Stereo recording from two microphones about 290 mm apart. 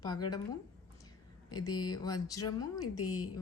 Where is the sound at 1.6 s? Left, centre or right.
Centre.